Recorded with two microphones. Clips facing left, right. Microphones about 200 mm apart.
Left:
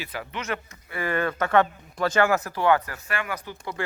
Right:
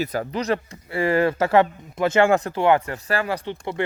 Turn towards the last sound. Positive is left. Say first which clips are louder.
# right 7 dB
turn(degrees=-30)  # may be behind; listen again after turning